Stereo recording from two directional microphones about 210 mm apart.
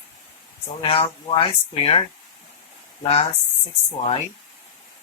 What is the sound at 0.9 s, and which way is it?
Speech, 25° left (ahead or behind).